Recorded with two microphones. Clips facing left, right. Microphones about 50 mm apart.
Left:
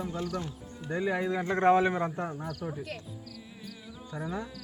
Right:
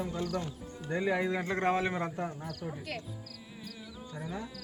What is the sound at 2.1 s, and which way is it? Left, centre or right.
Speech, centre.